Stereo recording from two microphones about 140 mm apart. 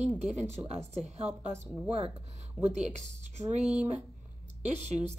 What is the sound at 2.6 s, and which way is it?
Speech, 55° right (ahead or behind).